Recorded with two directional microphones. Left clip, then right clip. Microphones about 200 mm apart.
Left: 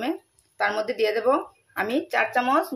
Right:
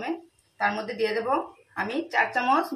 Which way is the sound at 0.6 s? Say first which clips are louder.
Left 3 dB; 45° left (ahead or behind).